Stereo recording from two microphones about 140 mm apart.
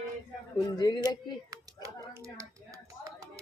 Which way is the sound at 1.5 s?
25° right (ahead or behind).